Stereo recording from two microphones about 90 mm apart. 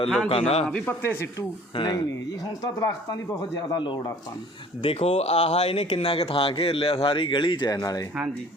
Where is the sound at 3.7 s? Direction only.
60° left (ahead or behind).